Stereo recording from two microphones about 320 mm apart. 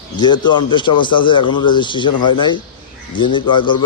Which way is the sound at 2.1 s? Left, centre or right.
Left.